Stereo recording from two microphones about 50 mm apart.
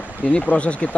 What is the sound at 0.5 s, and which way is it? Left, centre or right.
Speech, left.